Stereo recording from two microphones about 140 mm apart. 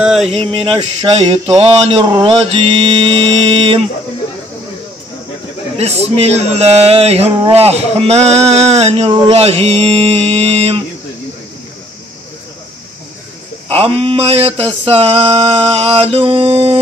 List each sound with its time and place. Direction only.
0.0 s speech: 5° right (ahead or behind)
0.3 s mantra: 40° right (ahead or behind)
5.8 s a man's voice: 50° right (ahead or behind)
13.7 s a man's voice: 40° right (ahead or behind)